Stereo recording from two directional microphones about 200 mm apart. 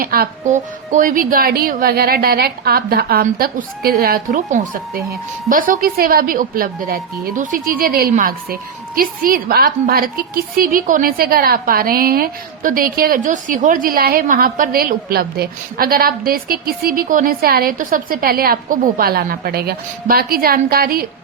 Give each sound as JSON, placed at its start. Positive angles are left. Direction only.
{"t": 0.0, "sound": "a woman's voice", "side_deg": -45}